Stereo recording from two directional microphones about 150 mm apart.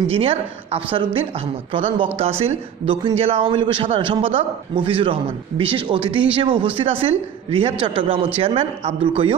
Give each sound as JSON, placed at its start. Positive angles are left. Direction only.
{"t": 0.1, "sound": "a man's voice", "side_deg": -40}